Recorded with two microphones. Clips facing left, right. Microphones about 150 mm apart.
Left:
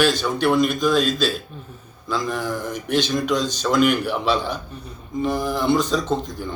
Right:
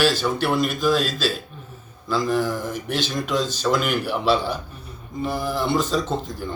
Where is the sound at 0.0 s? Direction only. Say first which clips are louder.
Left 1 dB; 5° right (ahead or behind).